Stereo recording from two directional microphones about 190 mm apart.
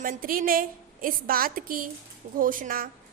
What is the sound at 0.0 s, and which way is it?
A woman's voice, 45° right (ahead or behind).